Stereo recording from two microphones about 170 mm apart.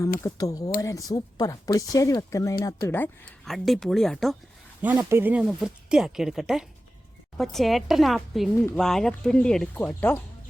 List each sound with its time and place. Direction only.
0.0 s speech: 20° left (ahead or behind)
3.4 s speech: centre (ahead or behind)
4.8 s speech: 10° right (ahead or behind); by 10.2 s 10° left (ahead or behind)